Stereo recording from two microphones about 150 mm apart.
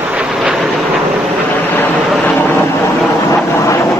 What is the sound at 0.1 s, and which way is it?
Vehicle, 5° right (ahead or behind).